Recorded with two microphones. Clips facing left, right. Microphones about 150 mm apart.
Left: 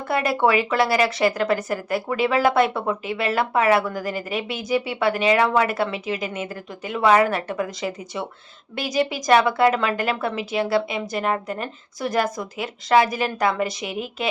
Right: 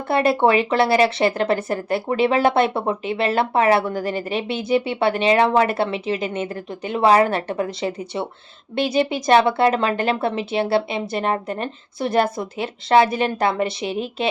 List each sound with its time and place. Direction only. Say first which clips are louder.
0.1 s speech: right 3 dB; 25° right (ahead or behind)